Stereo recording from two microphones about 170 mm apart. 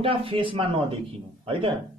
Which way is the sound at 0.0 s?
30° right (ahead or behind).